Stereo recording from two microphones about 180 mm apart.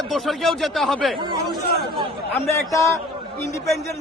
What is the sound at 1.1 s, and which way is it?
Speech, 25° right (ahead or behind).